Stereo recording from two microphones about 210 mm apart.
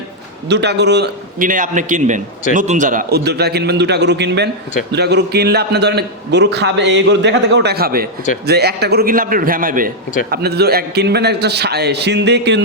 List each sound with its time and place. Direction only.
0.4 s a man's voice: 55° right (ahead or behind)